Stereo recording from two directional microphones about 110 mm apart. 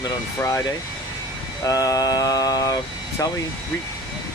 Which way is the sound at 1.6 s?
35° left (ahead or behind).